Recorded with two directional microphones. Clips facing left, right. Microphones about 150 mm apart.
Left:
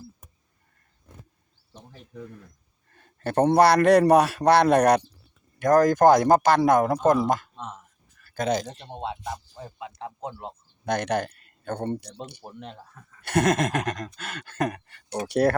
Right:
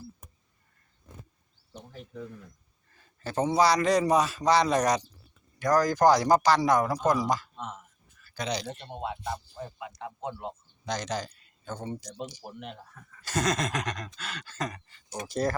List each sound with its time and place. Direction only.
2.9 s a man's voice: 60° left (ahead or behind)
9.6 s speech: 20° left (ahead or behind)
10.0 s speech: 35° left (ahead or behind)
10.8 s a man's voice: 60° left (ahead or behind)